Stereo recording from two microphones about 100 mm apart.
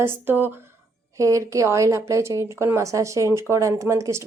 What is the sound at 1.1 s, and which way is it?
Speech, 30° right (ahead or behind).